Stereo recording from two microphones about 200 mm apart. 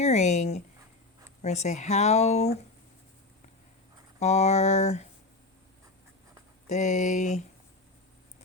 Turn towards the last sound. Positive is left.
turn(degrees=35)  # may be behind; listen again after turning